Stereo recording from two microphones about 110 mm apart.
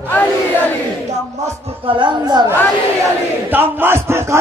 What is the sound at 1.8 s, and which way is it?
Speech, 45° right (ahead or behind).